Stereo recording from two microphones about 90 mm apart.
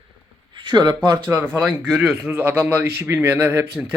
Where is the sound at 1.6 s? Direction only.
10° right (ahead or behind).